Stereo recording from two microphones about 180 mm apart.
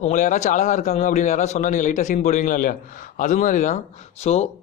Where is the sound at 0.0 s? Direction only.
45° left (ahead or behind).